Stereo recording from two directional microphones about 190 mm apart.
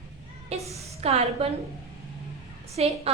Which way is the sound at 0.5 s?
35° right (ahead or behind).